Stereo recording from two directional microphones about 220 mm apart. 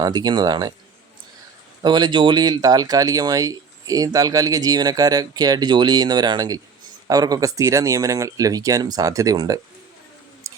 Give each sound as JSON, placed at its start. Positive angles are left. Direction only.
{"t": 0.0, "sound": "speech", "side_deg": -15}
{"t": 1.8, "sound": "speech", "side_deg": -20}